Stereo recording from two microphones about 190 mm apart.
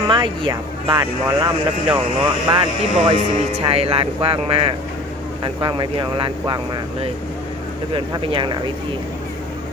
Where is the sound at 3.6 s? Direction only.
30° right (ahead or behind).